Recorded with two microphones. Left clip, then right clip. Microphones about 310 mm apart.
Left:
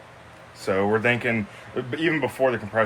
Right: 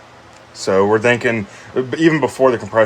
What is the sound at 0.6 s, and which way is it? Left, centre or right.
Speech, right.